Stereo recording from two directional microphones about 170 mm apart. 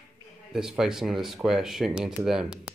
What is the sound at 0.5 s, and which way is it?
Speech, 5° right (ahead or behind).